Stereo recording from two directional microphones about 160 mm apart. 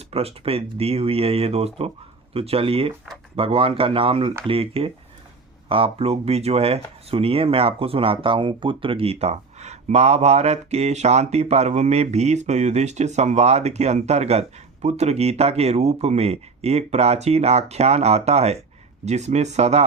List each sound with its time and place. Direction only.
0.1 s speech: 40° right (ahead or behind)